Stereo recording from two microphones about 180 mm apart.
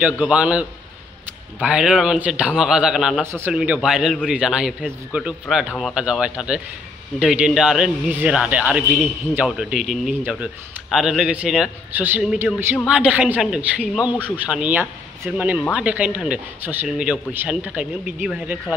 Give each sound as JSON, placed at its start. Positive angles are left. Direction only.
{"t": 0.2, "sound": "a man's voice", "side_deg": -5}